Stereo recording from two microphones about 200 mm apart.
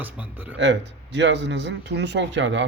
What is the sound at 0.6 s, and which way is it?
Speech, 60° right (ahead or behind).